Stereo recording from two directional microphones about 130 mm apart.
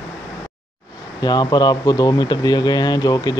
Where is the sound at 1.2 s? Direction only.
30° left (ahead or behind).